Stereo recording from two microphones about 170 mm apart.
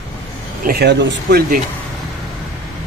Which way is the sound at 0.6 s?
65° right (ahead or behind).